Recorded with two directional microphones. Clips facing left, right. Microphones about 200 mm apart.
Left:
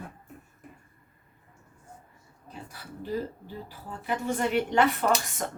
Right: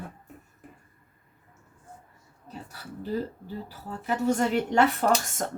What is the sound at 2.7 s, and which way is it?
A woman's voice, 40° right (ahead or behind).